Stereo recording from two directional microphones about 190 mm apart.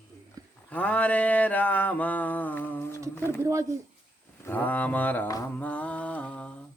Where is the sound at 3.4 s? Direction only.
15° right (ahead or behind).